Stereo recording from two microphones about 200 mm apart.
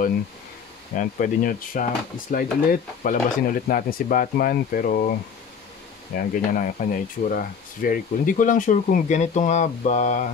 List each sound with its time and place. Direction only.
0.9 s speech: 40° left (ahead or behind)
6.1 s speech: 45° left (ahead or behind)